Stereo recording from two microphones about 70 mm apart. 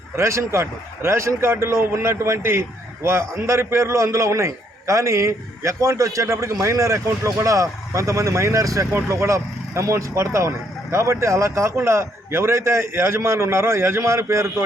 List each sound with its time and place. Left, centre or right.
0.2 s a man's voice: right
8.9 s a man's voice: right